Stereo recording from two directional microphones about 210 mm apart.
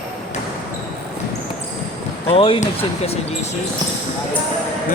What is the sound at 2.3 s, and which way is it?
Speech, 25° left (ahead or behind).